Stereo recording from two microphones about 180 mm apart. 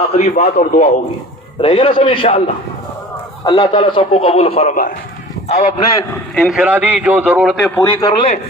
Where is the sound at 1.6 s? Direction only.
30° left (ahead or behind).